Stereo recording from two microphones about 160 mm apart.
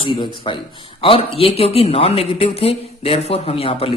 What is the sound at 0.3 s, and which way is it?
Speech, 30° left (ahead or behind).